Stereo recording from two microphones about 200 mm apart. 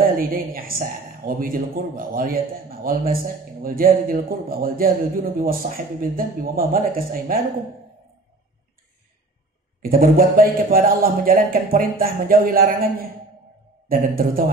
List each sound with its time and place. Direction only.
0.0 s a man's voice: 45° right (ahead or behind)
9.8 s a man's voice: 45° right (ahead or behind)
13.8 s a man's voice: 45° right (ahead or behind)